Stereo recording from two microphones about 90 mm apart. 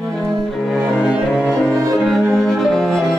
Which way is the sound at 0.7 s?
10° right (ahead or behind).